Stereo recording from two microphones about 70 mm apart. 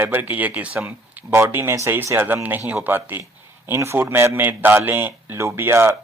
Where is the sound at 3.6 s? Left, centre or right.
Right.